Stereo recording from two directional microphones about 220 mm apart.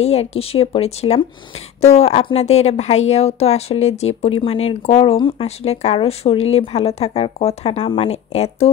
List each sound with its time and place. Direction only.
0.0 s speech: 30° left (ahead or behind)